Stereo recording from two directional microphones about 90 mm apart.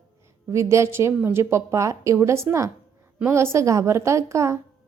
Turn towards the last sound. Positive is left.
turn(degrees=-35)  # may be behind; listen again after turning